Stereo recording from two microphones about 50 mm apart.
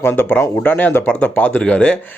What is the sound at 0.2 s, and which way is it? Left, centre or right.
Speech, left.